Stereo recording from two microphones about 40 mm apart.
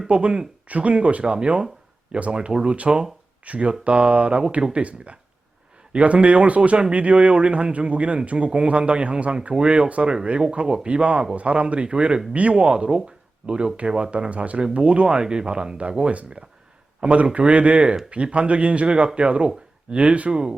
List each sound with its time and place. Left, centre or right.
0.1 s speech: right
3.4 s speech: right
14.6 s speech: right
20.3 s speech: right